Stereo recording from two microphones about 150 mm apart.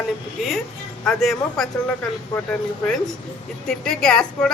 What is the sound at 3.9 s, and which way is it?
Speech, 5° left (ahead or behind).